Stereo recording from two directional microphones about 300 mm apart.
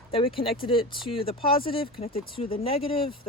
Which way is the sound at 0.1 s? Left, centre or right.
Centre.